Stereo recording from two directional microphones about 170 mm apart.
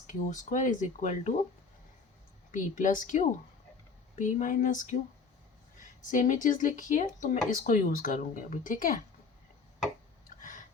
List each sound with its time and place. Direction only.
0.1 s speech: 50° left (ahead or behind)
2.5 s speech: 50° left (ahead or behind)
6.0 s speech: 50° left (ahead or behind)